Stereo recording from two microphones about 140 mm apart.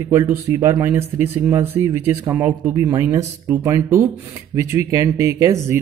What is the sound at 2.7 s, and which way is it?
Speech, 25° right (ahead or behind).